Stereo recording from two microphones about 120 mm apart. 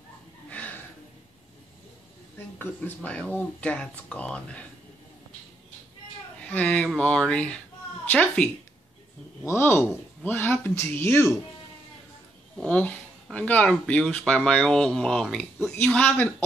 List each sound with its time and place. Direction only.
0.5 s gasp: 15° left (ahead or behind)
2.3 s speech: 15° left (ahead or behind)
6.4 s a woman's voice: 10° left (ahead or behind)
9.5 s speech: 20° left (ahead or behind)
12.6 s speech: 10° left (ahead or behind)